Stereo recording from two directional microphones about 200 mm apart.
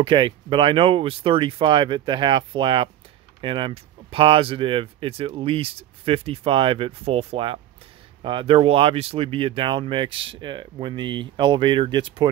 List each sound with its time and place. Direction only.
0.0 s speech: 25° right (ahead or behind)